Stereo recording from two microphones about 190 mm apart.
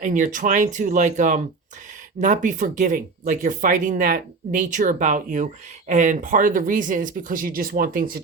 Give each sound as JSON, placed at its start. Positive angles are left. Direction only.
{"t": 0.0, "sound": "speech", "side_deg": -40}